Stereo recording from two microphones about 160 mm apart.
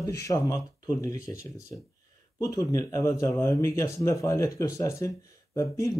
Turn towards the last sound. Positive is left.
turn(degrees=20)  # may be behind; listen again after turning